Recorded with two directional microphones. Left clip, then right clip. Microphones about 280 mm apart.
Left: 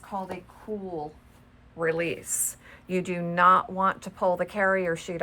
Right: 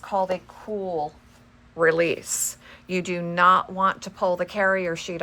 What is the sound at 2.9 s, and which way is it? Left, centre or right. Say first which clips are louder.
Speech: right 2 dB; centre.